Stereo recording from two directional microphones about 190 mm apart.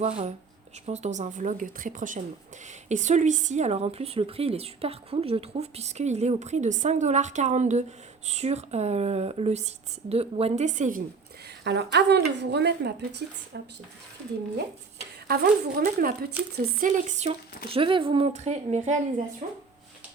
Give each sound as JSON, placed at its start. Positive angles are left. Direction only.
{"t": 0.0, "sound": "speech", "side_deg": -35}
{"t": 11.6, "sound": "a woman's voice", "side_deg": -60}
{"t": 15.3, "sound": "speech", "side_deg": -50}
{"t": 16.4, "sound": "speech", "side_deg": -10}
{"t": 16.8, "sound": "speech", "side_deg": -40}
{"t": 17.7, "sound": "speech", "side_deg": -25}